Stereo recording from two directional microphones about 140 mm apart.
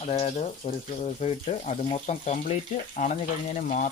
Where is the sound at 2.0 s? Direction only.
60° left (ahead or behind).